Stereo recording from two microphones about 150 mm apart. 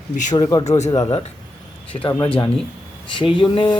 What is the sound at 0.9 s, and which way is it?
Speech, 25° left (ahead or behind).